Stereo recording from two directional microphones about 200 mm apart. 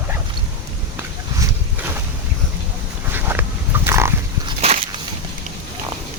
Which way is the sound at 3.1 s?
10° right (ahead or behind).